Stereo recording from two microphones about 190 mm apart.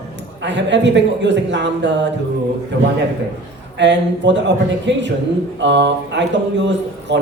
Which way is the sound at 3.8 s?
70° right (ahead or behind).